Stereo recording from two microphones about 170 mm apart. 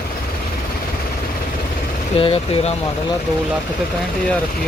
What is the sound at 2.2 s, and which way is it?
Speech, 35° left (ahead or behind).